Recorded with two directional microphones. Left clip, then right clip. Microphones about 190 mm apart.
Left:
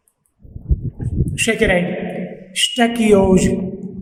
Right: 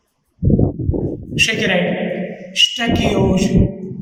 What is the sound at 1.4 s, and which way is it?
A man's voice, 45° left (ahead or behind).